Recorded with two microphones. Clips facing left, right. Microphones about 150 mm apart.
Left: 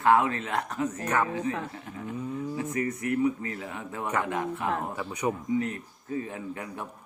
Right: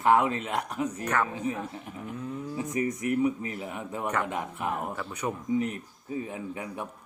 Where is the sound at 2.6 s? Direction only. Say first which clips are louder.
Right 3 dB; 15° right (ahead or behind).